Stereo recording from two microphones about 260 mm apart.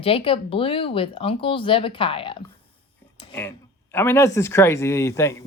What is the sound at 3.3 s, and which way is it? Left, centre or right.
Speech, centre.